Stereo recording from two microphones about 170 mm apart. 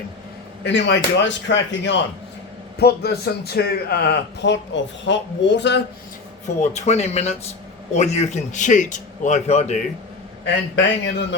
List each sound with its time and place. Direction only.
0.6 s speech: 90° left
2.7 s a man's voice: 70° left (ahead or behind); by 5.8 s 90° left
6.6 s a man's voice: 40° left (ahead or behind)
10.4 s speech: 90° left